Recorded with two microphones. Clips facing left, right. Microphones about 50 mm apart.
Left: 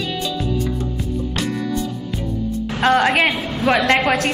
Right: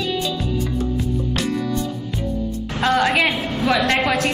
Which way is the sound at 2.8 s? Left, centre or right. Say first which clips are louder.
Left 2 dB; left.